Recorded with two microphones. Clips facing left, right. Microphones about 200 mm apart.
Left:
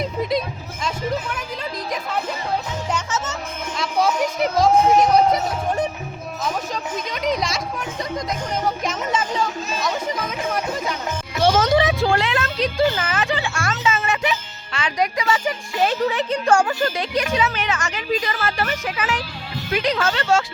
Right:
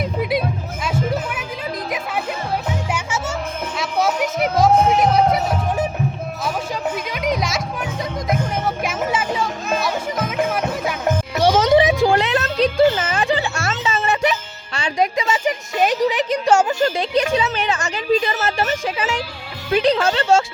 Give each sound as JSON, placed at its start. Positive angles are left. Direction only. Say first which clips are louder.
{"t": 0.0, "sound": "music", "louder": "right 2 dB", "side_deg": -5}
{"t": 2.9, "sound": "music", "louder": "right 1 dB", "side_deg": -10}
{"t": 7.1, "sound": "music", "louder": "left 1 dB", "side_deg": 0}
{"t": 8.8, "sound": "music", "louder": "right 2 dB", "side_deg": -5}
{"t": 11.3, "sound": "a sound", "louder": "right 2 dB", "side_deg": -15}
{"t": 12.3, "sound": "a sound", "louder": "right 4 dB", "side_deg": -35}
{"t": 13.6, "sound": "music", "louder": "even", "side_deg": -30}
{"t": 19.7, "sound": "speech", "louder": "right 5 dB", "side_deg": -30}